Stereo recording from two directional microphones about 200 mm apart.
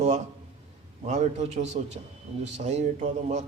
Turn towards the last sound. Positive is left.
turn(degrees=-35)  # may be behind; listen again after turning